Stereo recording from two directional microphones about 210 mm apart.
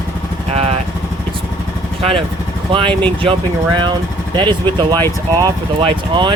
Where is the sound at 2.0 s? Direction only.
25° right (ahead or behind).